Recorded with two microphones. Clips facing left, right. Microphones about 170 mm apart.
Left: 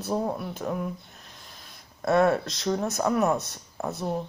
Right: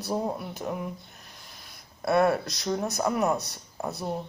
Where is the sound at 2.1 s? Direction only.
15° right (ahead or behind).